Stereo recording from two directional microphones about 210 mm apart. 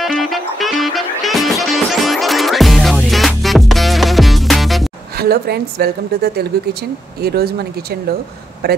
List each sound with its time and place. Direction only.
0.0 s music: centre (ahead or behind)
5.1 s a woman's voice: 45° right (ahead or behind)